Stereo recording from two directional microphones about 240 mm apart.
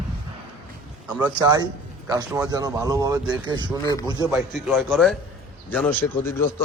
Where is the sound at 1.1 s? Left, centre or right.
Centre.